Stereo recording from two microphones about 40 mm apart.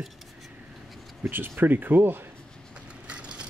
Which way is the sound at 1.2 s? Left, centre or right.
Right.